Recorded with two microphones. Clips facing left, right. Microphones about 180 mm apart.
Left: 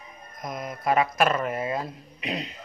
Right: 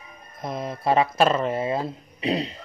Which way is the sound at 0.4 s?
30° right (ahead or behind).